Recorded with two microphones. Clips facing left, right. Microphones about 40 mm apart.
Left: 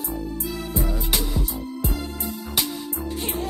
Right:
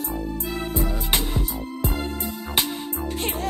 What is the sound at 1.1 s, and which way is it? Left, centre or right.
Music, right.